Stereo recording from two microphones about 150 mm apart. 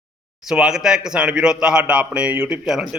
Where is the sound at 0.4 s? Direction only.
5° right (ahead or behind).